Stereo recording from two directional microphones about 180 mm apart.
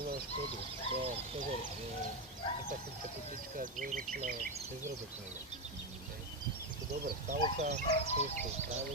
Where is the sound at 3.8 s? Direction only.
50° right (ahead or behind).